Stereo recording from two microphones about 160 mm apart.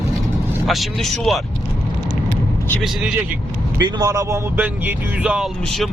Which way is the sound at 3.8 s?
25° right (ahead or behind).